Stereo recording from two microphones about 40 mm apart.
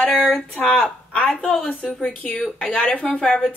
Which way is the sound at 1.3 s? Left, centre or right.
Centre.